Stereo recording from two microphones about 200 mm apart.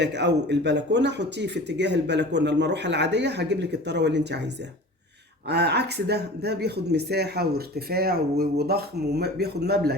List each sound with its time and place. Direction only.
0.0 s speech: 60° right (ahead or behind)
5.5 s speech: 55° right (ahead or behind)